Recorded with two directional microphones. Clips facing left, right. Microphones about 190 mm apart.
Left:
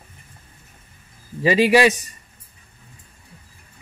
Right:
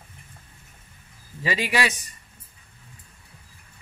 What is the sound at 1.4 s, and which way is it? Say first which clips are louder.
Speech: left 10 dB; 20° left (ahead or behind).